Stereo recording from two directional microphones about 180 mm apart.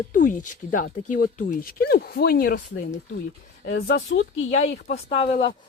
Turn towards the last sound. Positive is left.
turn(degrees=35)  # may be behind; listen again after turning